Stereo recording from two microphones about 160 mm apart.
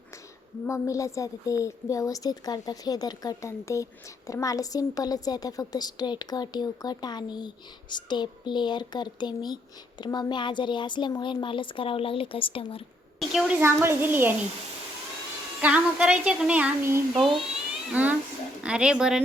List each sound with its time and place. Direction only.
0.7 s a woman's voice: 20° left (ahead or behind); by 12.8 s 35° left (ahead or behind)
13.1 s a woman's voice: 5° right (ahead or behind)
13.6 s speech: 15° right (ahead or behind)
15.6 s speech: 5° right (ahead or behind)